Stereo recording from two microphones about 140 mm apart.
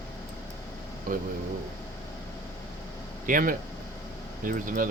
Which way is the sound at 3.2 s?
75° right (ahead or behind).